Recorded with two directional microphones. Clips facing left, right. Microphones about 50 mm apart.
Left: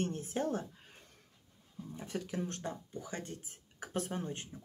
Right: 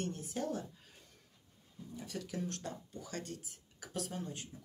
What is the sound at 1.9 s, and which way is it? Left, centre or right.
Speech, left.